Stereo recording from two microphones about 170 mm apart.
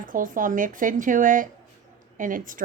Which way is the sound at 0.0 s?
50° right (ahead or behind).